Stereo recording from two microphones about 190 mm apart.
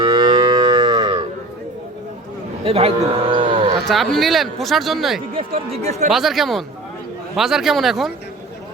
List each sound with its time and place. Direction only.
0.0 s moo: 25° right (ahead or behind)
2.6 s speech: 30° right (ahead or behind)
3.8 s speech: centre (ahead or behind)
5.8 s speech: 35° right (ahead or behind)
6.1 s speech: centre (ahead or behind)